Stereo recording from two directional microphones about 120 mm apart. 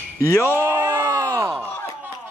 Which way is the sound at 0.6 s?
20° right (ahead or behind).